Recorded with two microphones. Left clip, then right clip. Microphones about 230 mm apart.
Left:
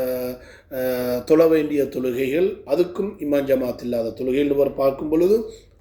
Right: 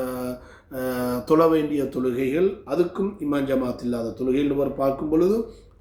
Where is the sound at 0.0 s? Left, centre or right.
Centre.